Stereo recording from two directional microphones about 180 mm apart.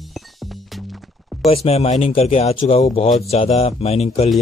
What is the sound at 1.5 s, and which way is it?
Speech, 35° left (ahead or behind).